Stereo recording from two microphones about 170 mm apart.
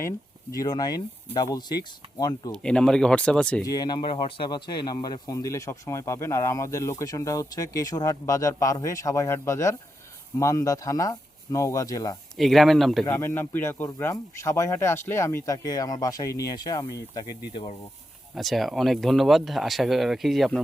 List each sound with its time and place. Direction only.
0.5 s speech: 20° left (ahead or behind)
2.5 s speech: 5° left (ahead or behind)
3.6 s speech: 20° left (ahead or behind)
12.4 s speech: centre (ahead or behind)
13.1 s speech: 15° left (ahead or behind)
18.3 s speech: centre (ahead or behind)